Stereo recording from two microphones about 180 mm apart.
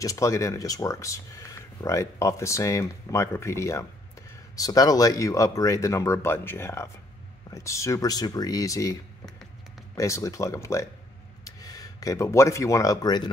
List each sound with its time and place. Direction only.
0.0 s speech: 20° left (ahead or behind)
9.9 s speech: 15° left (ahead or behind)